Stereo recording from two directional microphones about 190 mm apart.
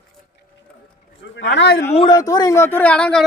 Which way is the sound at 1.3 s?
70° left (ahead or behind).